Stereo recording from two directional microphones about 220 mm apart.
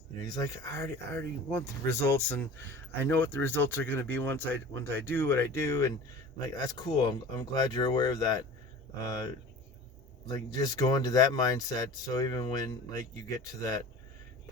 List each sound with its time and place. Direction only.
0.2 s speech: 15° left (ahead or behind)
10.2 s speech: 15° left (ahead or behind)